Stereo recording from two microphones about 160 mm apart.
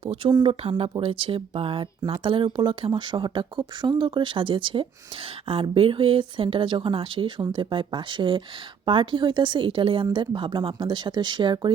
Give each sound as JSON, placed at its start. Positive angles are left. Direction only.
{"t": 0.0, "sound": "speech", "side_deg": -30}